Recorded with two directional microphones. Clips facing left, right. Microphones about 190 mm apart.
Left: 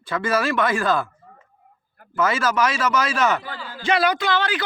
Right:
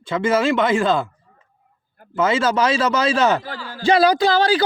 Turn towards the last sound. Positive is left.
turn(degrees=-35)  # may be behind; listen again after turning